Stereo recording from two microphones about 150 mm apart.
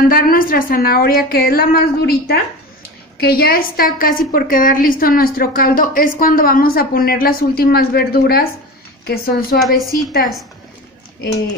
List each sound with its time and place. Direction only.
0.1 s a woman's voice: 70° left (ahead or behind); by 9.6 s 90° left
9.6 s a woman's voice: centre (ahead or behind)